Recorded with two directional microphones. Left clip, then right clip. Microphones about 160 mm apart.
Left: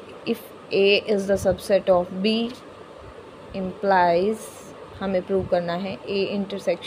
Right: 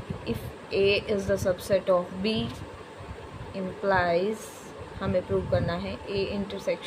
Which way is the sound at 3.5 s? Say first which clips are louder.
Left 6 dB; 35° left (ahead or behind).